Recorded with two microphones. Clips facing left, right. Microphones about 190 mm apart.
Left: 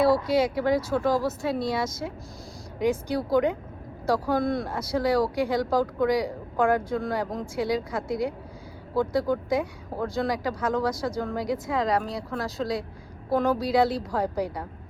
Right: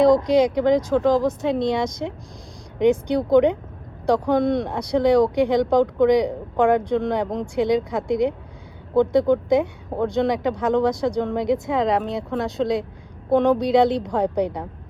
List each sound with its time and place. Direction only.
0.3 s speech: 5° left (ahead or behind)
10.2 s speech: centre (ahead or behind)